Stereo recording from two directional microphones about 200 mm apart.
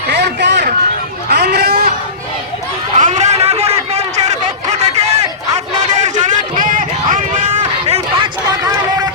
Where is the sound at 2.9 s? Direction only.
35° right (ahead or behind).